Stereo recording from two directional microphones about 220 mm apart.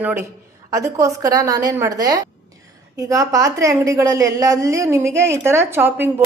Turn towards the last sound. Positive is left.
turn(degrees=-10)  # may be behind; listen again after turning